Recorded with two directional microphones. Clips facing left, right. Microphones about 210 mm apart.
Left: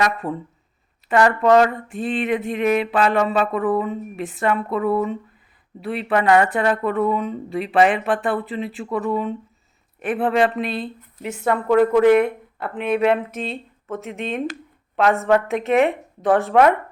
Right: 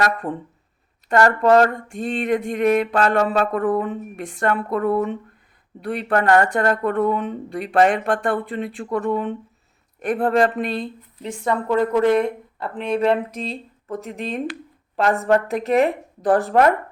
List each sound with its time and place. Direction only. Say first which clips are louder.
0.2 s speech: even; 20° right (ahead or behind)
1.0 s speech: even; 5° left (ahead or behind)
2.0 s a sound: right 1 dB; 45° right (ahead or behind)
2.4 s speech: right 1 dB; 5° left (ahead or behind)